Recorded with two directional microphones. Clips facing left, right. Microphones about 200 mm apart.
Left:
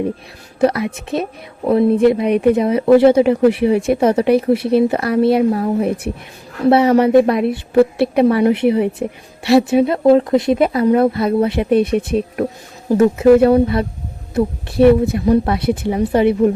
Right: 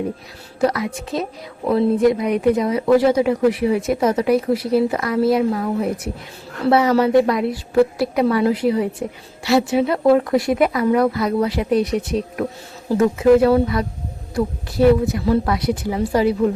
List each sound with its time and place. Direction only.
0.6 s a woman's voice: 25° left (ahead or behind)